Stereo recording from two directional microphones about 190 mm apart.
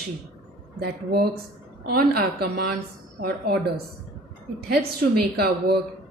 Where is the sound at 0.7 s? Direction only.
55° right (ahead or behind).